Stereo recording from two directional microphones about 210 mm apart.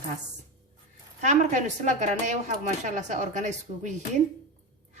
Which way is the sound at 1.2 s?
35° right (ahead or behind).